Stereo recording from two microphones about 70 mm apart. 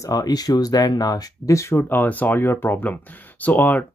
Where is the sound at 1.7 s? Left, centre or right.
Left.